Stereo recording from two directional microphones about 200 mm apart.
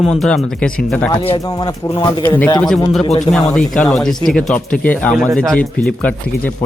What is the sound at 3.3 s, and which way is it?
Speech, 30° left (ahead or behind).